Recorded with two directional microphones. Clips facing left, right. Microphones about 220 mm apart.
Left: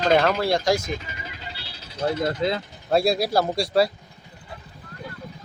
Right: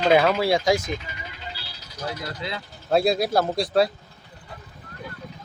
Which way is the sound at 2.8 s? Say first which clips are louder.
Even; centre (ahead or behind).